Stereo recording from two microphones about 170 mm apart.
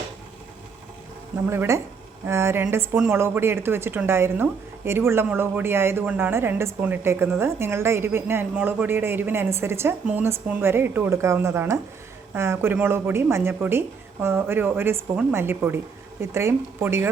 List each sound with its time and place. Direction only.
1.5 s a woman's voice: 15° right (ahead or behind)